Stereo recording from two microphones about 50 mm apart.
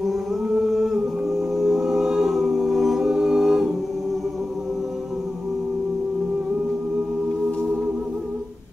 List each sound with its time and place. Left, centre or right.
0.6 s music: centre
2.3 s a capella: centre